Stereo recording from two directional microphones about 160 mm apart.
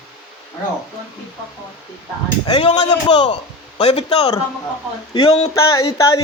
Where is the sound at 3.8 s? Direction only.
40° left (ahead or behind).